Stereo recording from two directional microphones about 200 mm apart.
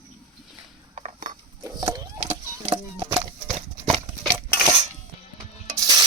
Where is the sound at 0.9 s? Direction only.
35° right (ahead or behind).